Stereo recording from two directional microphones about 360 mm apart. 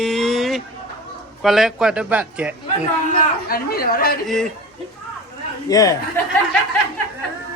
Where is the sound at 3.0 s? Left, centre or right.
Left.